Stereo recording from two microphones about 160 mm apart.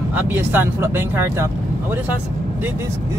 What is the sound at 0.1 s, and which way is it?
Speech, 10° right (ahead or behind).